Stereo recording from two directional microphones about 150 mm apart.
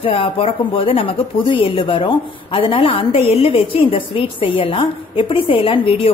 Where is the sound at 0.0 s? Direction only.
40° left (ahead or behind).